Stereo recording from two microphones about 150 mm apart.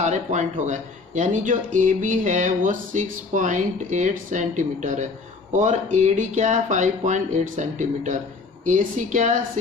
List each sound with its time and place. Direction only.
0.0 s speech: 50° right (ahead or behind)